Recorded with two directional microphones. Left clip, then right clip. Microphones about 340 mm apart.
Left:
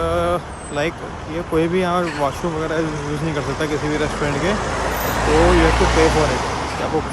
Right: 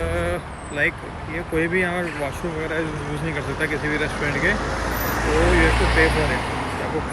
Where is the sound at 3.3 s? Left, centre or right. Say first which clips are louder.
Left 2 dB; centre.